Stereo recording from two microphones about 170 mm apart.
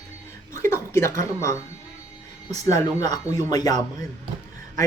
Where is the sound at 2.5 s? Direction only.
20° left (ahead or behind).